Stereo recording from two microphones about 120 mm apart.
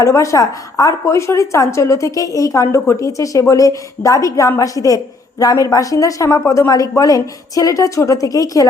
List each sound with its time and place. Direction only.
0.0 s a woman's voice: 25° left (ahead or behind)